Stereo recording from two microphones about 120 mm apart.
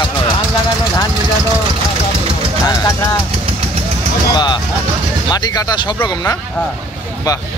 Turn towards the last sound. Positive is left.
turn(degrees=35)  # may be behind; listen again after turning